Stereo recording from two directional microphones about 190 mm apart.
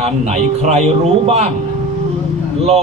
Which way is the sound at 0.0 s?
35° right (ahead or behind).